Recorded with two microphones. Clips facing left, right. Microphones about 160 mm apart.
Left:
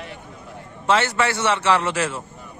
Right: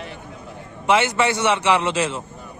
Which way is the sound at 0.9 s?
15° right (ahead or behind).